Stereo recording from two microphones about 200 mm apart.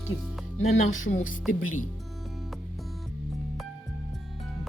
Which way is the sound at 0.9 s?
75° left (ahead or behind).